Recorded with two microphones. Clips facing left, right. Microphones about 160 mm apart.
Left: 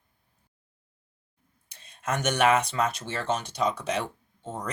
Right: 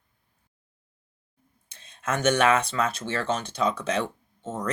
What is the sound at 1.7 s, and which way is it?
Speech, 15° left (ahead or behind).